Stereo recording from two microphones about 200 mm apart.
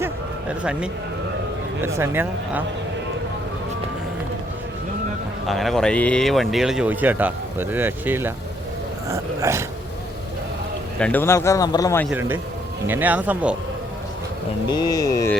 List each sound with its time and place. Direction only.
0.6 s speech: 5° right (ahead or behind)
5.5 s speech: centre (ahead or behind)
11.0 s a man's voice: 10° left (ahead or behind)
12.1 s speech: 10° right (ahead or behind)
14.7 s a man's voice: 20° left (ahead or behind)